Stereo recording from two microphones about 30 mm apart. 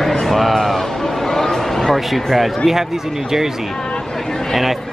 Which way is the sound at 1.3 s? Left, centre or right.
Centre.